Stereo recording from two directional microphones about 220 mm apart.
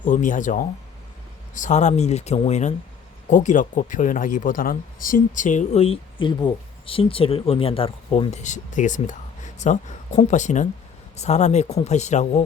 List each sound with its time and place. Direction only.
0.0 s speech: 35° left (ahead or behind)